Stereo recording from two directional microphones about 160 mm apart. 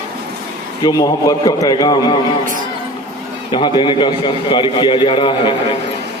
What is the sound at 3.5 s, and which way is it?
A man's voice, 30° left (ahead or behind).